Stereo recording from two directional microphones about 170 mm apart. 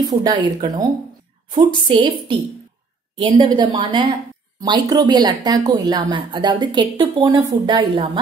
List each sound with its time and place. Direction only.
0.1 s speech: 25° right (ahead or behind)
3.2 s speech: 30° right (ahead or behind)